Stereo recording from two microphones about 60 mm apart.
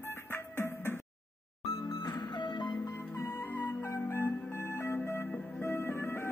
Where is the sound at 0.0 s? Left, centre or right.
Left.